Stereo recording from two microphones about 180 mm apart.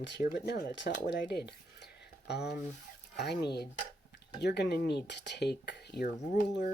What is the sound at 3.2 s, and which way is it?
Speech, 65° left (ahead or behind).